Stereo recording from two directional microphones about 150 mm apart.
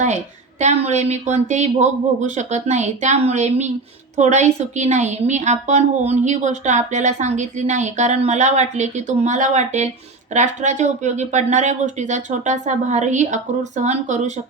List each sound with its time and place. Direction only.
0.6 s a woman's voice: 45° right (ahead or behind)